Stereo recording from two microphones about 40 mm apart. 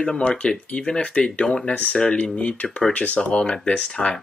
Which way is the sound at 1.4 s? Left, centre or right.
Left.